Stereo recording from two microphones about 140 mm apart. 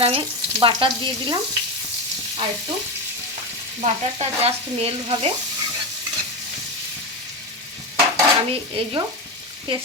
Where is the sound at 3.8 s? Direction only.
50° right (ahead or behind).